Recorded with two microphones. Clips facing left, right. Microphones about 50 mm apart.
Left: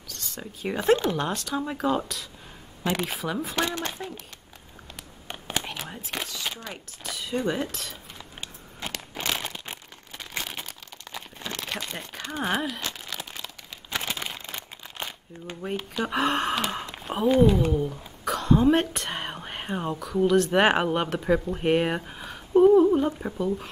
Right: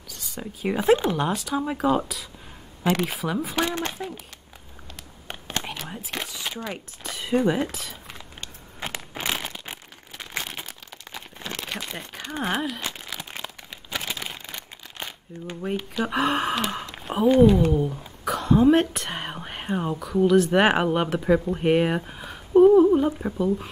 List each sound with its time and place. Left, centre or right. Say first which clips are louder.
0.1 s speech: right 3 dB; centre
5.3 s whispering: even; centre
6.2 s speech: right 2 dB; centre
7.0 s speech: right 6 dB; right
7.4 s a sound: right 4 dB; centre
8.8 s crushing: right 2 dB; centre
9.4 s crumpling: right 1 dB; centre
11.7 s speech: even; centre
12.8 s crumpling: right 1 dB; centre
16.9 s speech: right 3 dB; centre